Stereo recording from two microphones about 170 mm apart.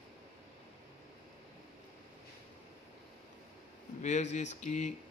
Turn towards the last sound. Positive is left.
turn(degrees=45)  # may be behind; listen again after turning